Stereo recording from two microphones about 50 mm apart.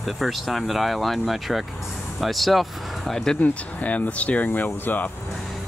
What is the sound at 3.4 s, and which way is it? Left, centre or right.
Speech, left.